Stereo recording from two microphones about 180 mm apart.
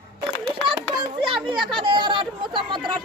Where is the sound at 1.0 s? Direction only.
25° right (ahead or behind).